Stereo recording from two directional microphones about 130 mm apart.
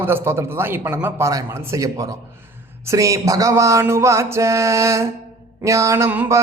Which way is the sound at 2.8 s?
25° right (ahead or behind).